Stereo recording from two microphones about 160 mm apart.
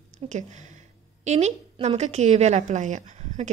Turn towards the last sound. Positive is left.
turn(degrees=-45)  # may be behind; listen again after turning